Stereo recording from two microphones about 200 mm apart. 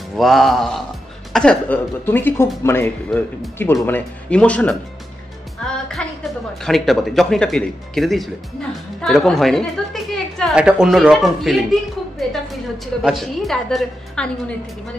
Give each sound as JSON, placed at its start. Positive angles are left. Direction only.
{"t": 0.1, "sound": "a woman's voice", "side_deg": 0}
{"t": 6.0, "sound": "music", "side_deg": 5}
{"t": 6.6, "sound": "a woman's voice", "side_deg": 0}